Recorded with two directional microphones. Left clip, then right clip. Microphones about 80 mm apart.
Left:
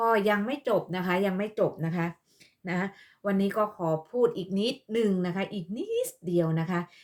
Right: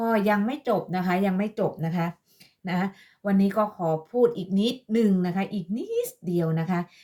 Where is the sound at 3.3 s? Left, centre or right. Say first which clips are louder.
Right 3 dB; left.